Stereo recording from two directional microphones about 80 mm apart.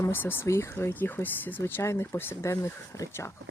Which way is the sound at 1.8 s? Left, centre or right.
Left.